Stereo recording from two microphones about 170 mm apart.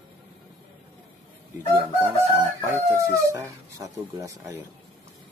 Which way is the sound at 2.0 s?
15° right (ahead or behind).